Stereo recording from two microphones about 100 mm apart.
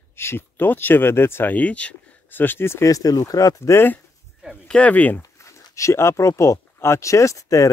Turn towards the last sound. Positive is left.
turn(degrees=35)  # may be behind; listen again after turning